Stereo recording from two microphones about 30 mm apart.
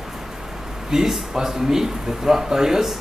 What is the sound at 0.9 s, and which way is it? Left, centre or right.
Speech, right.